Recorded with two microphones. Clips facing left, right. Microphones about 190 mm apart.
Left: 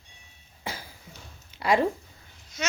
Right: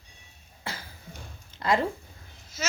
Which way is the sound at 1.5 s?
10° left (ahead or behind).